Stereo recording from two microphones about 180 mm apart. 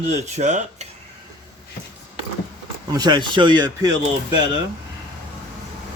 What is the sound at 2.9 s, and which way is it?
Speech, 20° right (ahead or behind).